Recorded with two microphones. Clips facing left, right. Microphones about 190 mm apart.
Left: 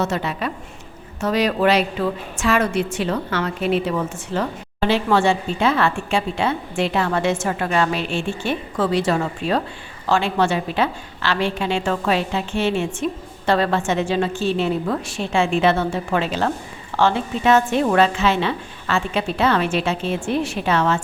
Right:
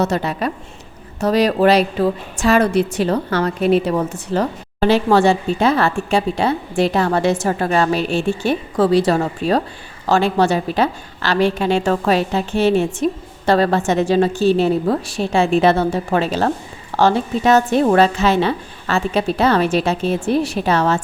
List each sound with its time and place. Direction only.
0.0 s a woman's voice: 40° right (ahead or behind)